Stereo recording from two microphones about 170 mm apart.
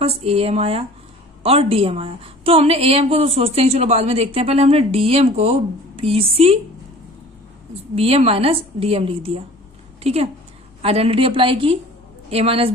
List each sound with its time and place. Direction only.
0.0 s a woman's voice: 35° right (ahead or behind)
7.9 s a woman's voice: 35° right (ahead or behind)